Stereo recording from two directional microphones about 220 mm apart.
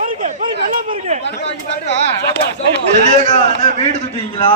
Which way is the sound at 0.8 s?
25° right (ahead or behind).